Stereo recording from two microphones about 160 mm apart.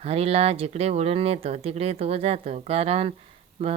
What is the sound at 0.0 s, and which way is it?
Speech, 40° right (ahead or behind).